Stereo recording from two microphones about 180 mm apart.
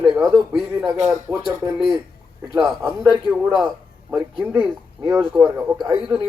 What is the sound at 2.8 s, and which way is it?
Speech, 25° right (ahead or behind).